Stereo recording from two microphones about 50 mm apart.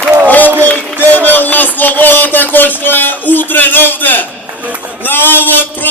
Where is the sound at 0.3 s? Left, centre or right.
Left.